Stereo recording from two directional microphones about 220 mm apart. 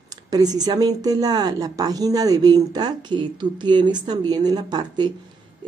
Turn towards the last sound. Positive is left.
turn(degrees=-20)  # may be behind; listen again after turning